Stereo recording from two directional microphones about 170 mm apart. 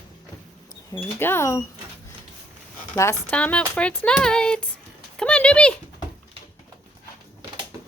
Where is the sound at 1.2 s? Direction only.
15° left (ahead or behind).